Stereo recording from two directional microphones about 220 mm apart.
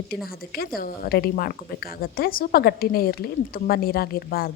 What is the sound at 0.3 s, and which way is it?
A woman's voice, 45° left (ahead or behind).